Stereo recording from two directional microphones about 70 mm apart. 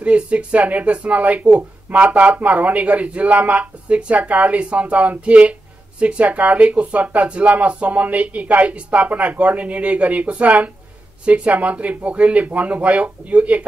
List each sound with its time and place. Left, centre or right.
0.0 s speech: centre